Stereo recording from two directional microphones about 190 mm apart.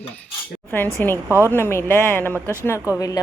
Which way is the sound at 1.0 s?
10° left (ahead or behind).